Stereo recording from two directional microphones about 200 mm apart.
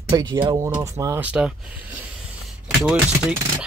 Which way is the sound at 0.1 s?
20° right (ahead or behind).